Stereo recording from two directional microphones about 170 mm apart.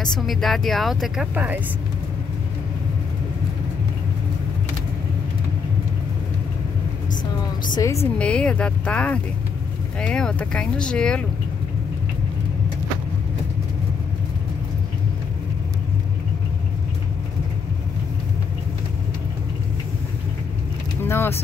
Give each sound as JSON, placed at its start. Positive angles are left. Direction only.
{"t": 0.0, "sound": "speech", "side_deg": 0}
{"t": 7.7, "sound": "a woman's voice", "side_deg": 20}
{"t": 8.2, "sound": "speech", "side_deg": 5}
{"t": 21.0, "sound": "vehicle", "side_deg": 15}